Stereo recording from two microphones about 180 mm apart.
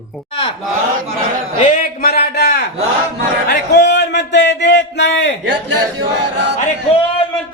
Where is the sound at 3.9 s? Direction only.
70° left (ahead or behind).